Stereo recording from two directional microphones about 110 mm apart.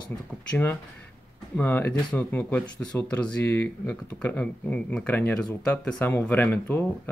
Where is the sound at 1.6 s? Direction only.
15° left (ahead or behind).